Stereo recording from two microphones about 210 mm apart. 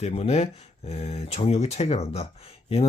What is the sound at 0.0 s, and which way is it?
Speech, 30° left (ahead or behind).